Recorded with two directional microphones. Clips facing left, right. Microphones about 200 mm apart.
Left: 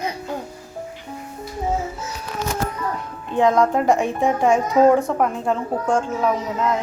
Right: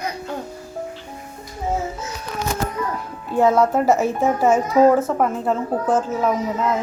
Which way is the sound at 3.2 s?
5° right (ahead or behind).